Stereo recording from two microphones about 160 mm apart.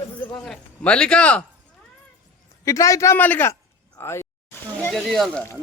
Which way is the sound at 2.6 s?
20° left (ahead or behind).